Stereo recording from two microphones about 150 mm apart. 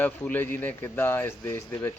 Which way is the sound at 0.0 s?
10° left (ahead or behind).